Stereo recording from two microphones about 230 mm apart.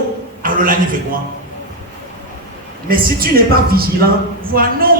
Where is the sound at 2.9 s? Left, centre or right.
Right.